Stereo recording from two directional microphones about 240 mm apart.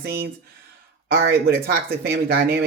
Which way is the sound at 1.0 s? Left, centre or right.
Right.